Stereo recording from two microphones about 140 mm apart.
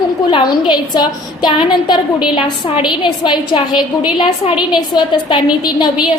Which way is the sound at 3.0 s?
35° left (ahead or behind).